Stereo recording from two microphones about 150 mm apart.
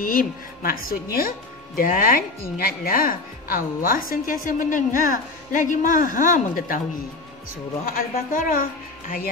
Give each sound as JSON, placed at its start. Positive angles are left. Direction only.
{"t": 0.0, "sound": "a woman's voice", "side_deg": 65}
{"t": 7.8, "sound": "speech", "side_deg": 70}